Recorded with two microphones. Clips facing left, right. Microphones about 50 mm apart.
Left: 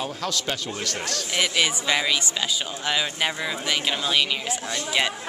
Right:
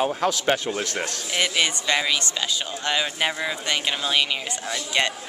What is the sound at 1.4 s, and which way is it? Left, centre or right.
Speech, centre.